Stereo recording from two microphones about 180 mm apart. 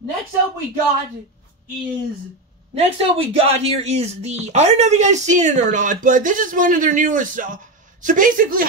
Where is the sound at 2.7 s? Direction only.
35° right (ahead or behind); by 8.6 s 50° right (ahead or behind).